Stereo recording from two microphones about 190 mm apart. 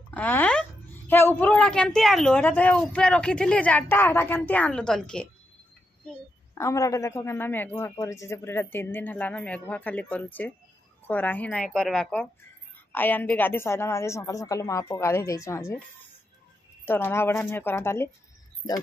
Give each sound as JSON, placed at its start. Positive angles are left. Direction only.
{"t": 0.1, "sound": "a woman's voice", "side_deg": 10}
{"t": 6.6, "sound": "a man's voice", "side_deg": 15}
{"t": 16.8, "sound": "a man's voice", "side_deg": 10}